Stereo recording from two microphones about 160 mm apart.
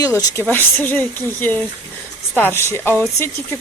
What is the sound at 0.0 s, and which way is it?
A woman's voice, 20° left (ahead or behind).